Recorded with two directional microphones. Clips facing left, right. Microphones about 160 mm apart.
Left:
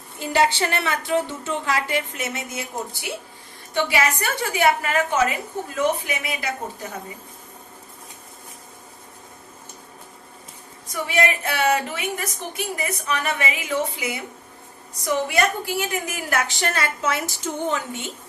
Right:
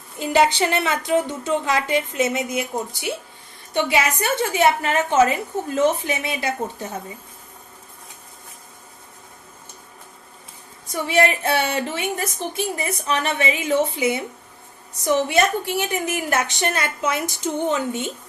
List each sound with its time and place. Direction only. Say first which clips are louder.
0.2 s a woman's voice: right 3 dB; 20° right (ahead or behind)
3.8 s a woman's voice: right 1 dB; 20° right (ahead or behind)
11.1 s a woman's voice: right 4 dB; 30° right (ahead or behind)